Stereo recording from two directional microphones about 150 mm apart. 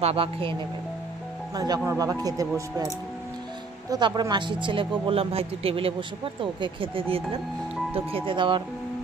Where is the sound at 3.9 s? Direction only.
30° right (ahead or behind).